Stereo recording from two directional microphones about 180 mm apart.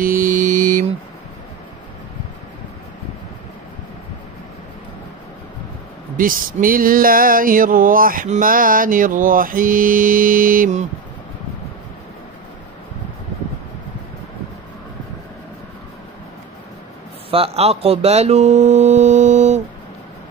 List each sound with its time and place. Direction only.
0.0 s mantra: 50° right (ahead or behind)
6.1 s a sound: 50° right (ahead or behind)
17.3 s speech: 35° right (ahead or behind)